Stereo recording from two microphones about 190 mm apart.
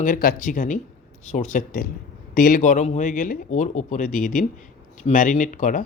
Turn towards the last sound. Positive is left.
turn(degrees=45)  # may be behind; listen again after turning